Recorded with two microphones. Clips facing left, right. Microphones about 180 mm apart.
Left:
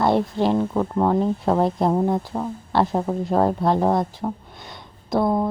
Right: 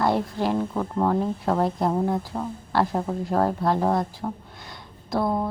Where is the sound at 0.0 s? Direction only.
25° left (ahead or behind).